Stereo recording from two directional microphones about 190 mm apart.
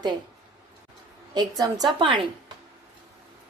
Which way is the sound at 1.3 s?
20° right (ahead or behind).